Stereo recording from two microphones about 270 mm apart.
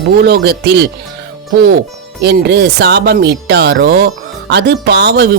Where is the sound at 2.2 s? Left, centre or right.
Right.